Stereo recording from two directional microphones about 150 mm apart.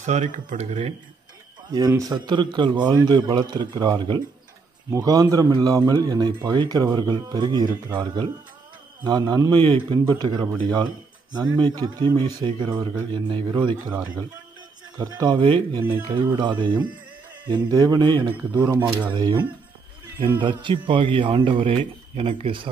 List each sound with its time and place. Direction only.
0.0 s speech: 55° right (ahead or behind)
1.7 s a man's voice: 25° right (ahead or behind)
18.7 s speech: 15° right (ahead or behind)
20.3 s a man's voice: 35° right (ahead or behind)